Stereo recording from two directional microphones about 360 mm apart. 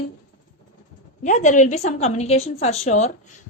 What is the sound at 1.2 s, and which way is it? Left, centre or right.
Speech, centre.